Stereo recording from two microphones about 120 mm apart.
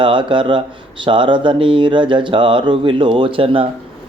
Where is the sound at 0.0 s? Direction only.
45° right (ahead or behind).